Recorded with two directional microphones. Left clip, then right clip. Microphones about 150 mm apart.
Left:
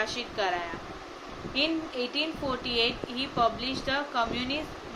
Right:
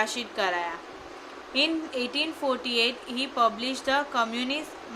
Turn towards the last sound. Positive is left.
turn(degrees=-25)  # may be behind; listen again after turning